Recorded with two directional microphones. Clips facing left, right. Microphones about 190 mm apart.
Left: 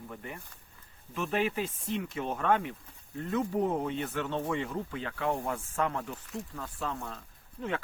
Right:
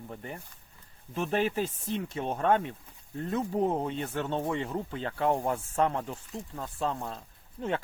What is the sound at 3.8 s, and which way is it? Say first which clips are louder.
Speech: right 1 dB; 30° right (ahead or behind).